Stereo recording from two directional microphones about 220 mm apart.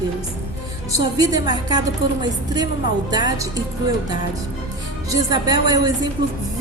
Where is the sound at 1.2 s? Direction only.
15° right (ahead or behind).